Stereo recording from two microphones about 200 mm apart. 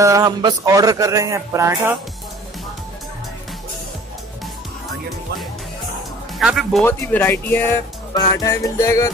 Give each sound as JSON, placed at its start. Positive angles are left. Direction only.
{"t": 0.0, "sound": "speech", "side_deg": -15}
{"t": 6.4, "sound": "speech", "side_deg": 0}
{"t": 6.9, "sound": "speech", "side_deg": 10}